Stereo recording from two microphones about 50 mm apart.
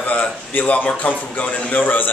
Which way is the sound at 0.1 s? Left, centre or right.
Left.